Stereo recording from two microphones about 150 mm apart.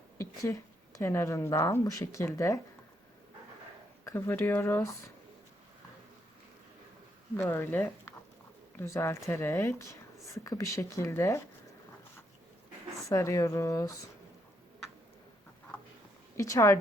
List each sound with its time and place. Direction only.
0.2 s speech: 20° left (ahead or behind)
4.0 s speech: 15° left (ahead or behind)
7.3 s speech: 15° left (ahead or behind)
13.1 s speech: 20° left (ahead or behind)
16.4 s speech: 20° left (ahead or behind)